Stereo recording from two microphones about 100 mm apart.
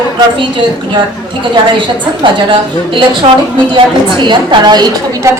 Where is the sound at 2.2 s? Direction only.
55° right (ahead or behind).